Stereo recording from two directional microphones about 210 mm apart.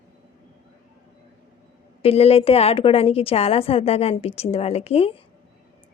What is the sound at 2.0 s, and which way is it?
A woman's voice, 30° left (ahead or behind).